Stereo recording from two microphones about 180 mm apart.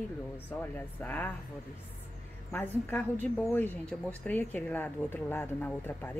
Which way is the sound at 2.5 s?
10° left (ahead or behind).